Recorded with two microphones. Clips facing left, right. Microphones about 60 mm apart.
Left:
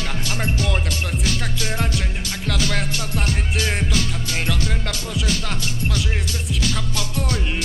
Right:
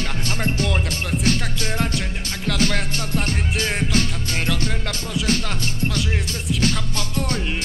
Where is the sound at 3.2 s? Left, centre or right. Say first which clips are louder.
Even; right.